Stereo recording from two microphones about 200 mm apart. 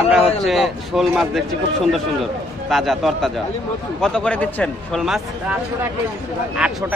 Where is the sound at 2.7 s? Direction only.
Centre (ahead or behind).